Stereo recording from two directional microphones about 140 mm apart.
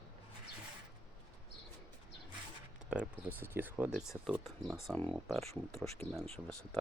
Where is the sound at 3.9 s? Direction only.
Centre (ahead or behind).